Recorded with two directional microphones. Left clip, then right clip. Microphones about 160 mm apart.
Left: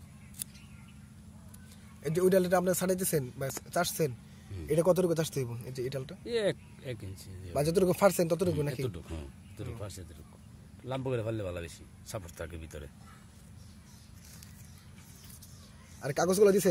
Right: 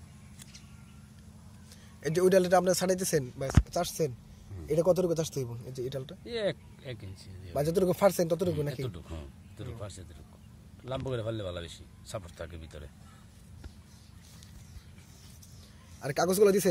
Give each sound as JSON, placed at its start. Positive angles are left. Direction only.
{"t": 2.0, "sound": "speech", "side_deg": 0}
{"t": 4.6, "sound": "a man's voice", "side_deg": 15}
{"t": 6.2, "sound": "speech", "side_deg": 55}
{"t": 7.5, "sound": "a man's voice", "side_deg": 10}
{"t": 8.8, "sound": "speech", "side_deg": 45}
{"t": 16.0, "sound": "speech", "side_deg": 5}